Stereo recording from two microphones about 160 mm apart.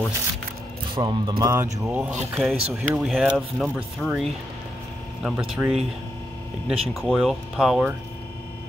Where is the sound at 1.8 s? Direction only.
10° right (ahead or behind).